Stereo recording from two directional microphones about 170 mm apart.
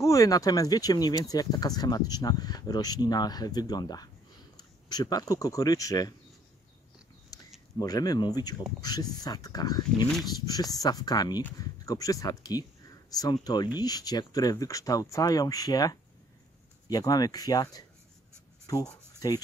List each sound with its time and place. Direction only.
0.0 s speech: 20° left (ahead or behind)
7.3 s a sound: 20° left (ahead or behind)
7.8 s speech: 20° left (ahead or behind)
19.1 s writing: 20° left (ahead or behind)